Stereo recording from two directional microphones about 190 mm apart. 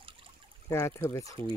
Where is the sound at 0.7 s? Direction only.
15° left (ahead or behind).